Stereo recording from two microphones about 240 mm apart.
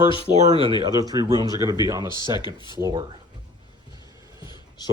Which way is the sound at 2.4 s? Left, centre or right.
Centre.